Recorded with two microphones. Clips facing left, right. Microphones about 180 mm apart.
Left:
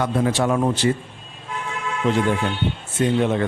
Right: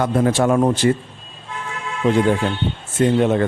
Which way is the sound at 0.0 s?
45° right (ahead or behind).